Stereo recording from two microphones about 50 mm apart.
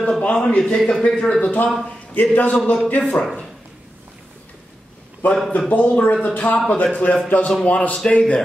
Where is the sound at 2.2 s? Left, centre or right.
Left.